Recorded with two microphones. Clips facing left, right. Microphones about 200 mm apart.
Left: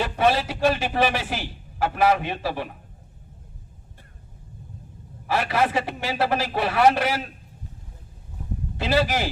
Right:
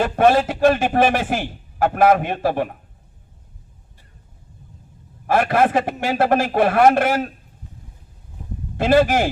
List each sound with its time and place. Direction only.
0.0 s a man's voice: 50° right (ahead or behind)
5.2 s a man's voice: 50° right (ahead or behind)
8.8 s a man's voice: 50° right (ahead or behind)